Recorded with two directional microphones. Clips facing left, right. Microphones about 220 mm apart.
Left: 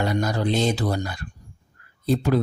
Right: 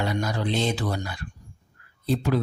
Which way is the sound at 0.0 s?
40° left (ahead or behind).